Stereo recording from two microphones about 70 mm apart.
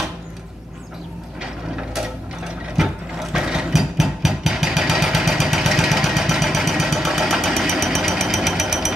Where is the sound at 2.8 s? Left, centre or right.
Centre.